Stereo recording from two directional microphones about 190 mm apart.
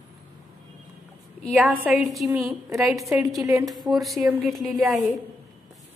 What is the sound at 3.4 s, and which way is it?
Speech, 15° right (ahead or behind).